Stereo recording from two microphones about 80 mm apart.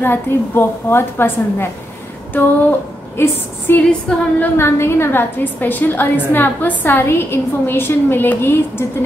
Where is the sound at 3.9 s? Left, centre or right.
Centre.